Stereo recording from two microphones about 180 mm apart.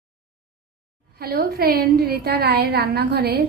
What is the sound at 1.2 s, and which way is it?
A woman's voice, 60° right (ahead or behind).